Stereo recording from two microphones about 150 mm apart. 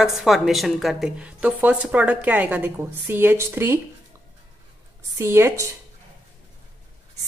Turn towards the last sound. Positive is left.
turn(degrees=-20)  # may be behind; listen again after turning